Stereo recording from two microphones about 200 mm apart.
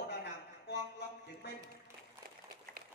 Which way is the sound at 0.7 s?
55° left (ahead or behind).